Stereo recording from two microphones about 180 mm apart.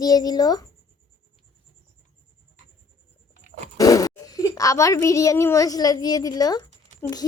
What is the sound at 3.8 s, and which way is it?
A child's voice, 20° left (ahead or behind).